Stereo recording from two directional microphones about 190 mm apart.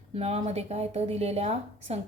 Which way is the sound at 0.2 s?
35° right (ahead or behind).